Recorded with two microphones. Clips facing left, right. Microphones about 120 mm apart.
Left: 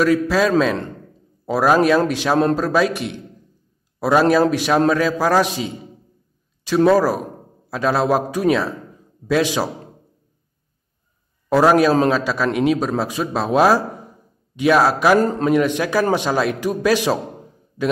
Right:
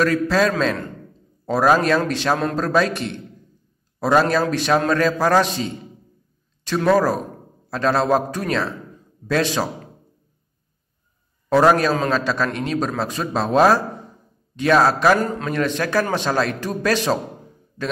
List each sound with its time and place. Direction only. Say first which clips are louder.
0.0 s a man's voice: left 2 dB; 10° left (ahead or behind)
6.9 s a man's voice: left 1 dB; 5° left (ahead or behind)
11.4 s a man's voice: left 2 dB; 5° left (ahead or behind)
15.1 s a man's voice: left 5 dB; 35° left (ahead or behind)
15.4 s a man's voice: left 5 dB; 15° left (ahead or behind)